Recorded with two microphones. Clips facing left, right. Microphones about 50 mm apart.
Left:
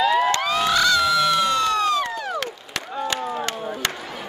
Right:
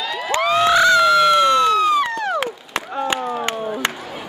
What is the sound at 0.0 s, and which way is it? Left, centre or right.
Crowd, centre.